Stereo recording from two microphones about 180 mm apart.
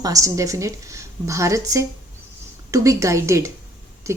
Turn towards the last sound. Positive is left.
turn(degrees=-15)  # may be behind; listen again after turning